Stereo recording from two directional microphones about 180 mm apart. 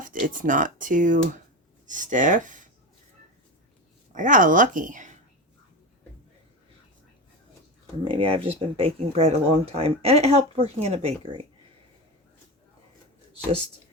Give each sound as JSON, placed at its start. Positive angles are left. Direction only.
{"t": 0.0, "sound": "speech", "side_deg": -45}
{"t": 4.1, "sound": "speech", "side_deg": -45}
{"t": 8.0, "sound": "speech", "side_deg": -30}